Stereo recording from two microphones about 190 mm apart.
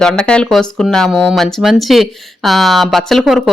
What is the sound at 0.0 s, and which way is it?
Speech, 5° left (ahead or behind).